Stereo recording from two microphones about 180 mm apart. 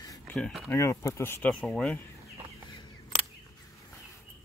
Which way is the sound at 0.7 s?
15° left (ahead or behind).